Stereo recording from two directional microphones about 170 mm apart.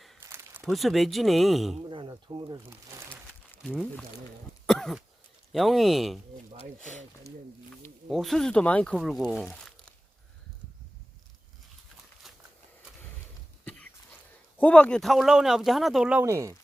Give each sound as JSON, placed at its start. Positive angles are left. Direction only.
{"t": 0.2, "sound": "a sound", "side_deg": -15}
{"t": 0.7, "sound": "speech", "side_deg": 0}
{"t": 1.7, "sound": "a sound", "side_deg": -30}
{"t": 3.1, "sound": "crumpling", "side_deg": 10}
{"t": 4.6, "sound": "throat clearing", "side_deg": 0}
{"t": 5.5, "sound": "speech", "side_deg": 0}
{"t": 8.1, "sound": "speech", "side_deg": 0}
{"t": 12.2, "sound": "a sound", "side_deg": 0}
{"t": 14.6, "sound": "speech", "side_deg": 5}
{"t": 16.2, "sound": "speech", "side_deg": -15}